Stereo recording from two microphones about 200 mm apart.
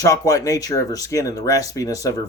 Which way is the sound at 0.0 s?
15° left (ahead or behind).